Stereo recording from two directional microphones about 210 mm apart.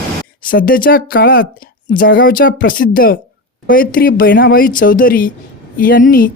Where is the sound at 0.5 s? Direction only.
40° left (ahead or behind).